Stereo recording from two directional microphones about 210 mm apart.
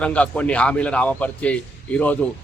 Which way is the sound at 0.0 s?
5° left (ahead or behind).